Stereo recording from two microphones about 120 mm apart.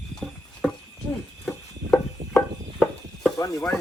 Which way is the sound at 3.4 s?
25° left (ahead or behind).